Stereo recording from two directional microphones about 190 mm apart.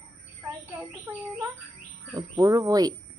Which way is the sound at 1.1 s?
10° right (ahead or behind).